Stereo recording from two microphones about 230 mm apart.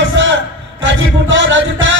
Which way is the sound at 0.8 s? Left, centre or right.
Right.